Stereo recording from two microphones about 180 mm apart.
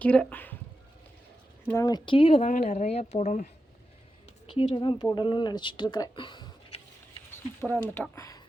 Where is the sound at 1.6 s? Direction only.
15° left (ahead or behind); by 3.5 s 40° left (ahead or behind).